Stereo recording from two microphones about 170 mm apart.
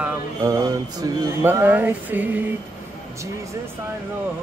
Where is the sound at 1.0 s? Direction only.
15° right (ahead or behind).